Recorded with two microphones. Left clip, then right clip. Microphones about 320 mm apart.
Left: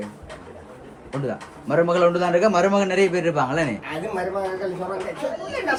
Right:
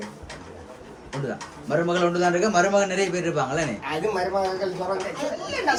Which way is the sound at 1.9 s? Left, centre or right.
Centre.